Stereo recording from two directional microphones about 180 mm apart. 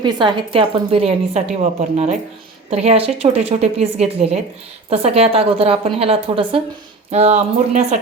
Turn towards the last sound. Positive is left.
turn(degrees=-40)  # may be behind; listen again after turning